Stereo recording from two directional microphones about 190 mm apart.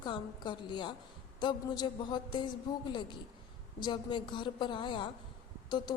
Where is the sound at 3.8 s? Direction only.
25° left (ahead or behind).